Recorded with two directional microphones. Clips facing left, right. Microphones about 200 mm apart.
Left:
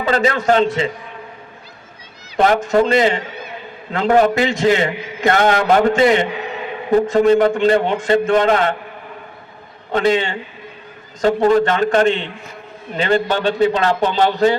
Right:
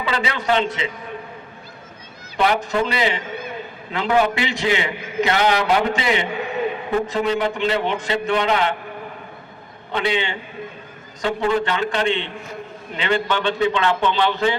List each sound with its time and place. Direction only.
0.0 s a man's voice: 45° left (ahead or behind)
2.3 s a man's voice: 45° left (ahead or behind)
9.9 s a man's voice: 45° left (ahead or behind)